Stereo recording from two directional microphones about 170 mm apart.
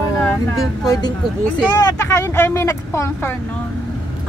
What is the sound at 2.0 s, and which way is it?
Speech, 15° left (ahead or behind).